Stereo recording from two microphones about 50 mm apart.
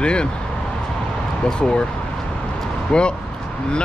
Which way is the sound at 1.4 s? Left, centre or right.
Centre.